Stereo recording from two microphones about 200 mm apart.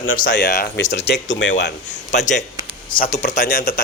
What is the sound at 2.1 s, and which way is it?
Speech, 35° left (ahead or behind).